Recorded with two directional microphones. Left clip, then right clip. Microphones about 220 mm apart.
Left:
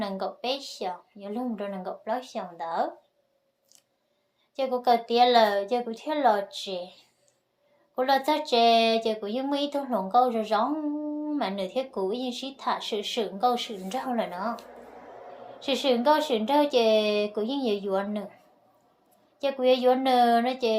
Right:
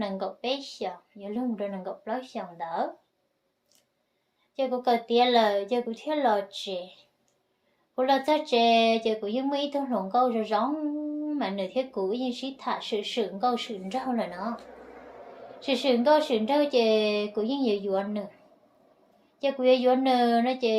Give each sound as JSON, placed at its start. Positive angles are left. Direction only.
{"t": 0.0, "sound": "a sound", "side_deg": 35}
{"t": 4.5, "sound": "speech", "side_deg": 35}
{"t": 19.4, "sound": "speech", "side_deg": 35}